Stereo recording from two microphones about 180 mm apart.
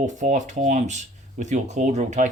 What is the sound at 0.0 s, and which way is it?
Speech, 45° right (ahead or behind).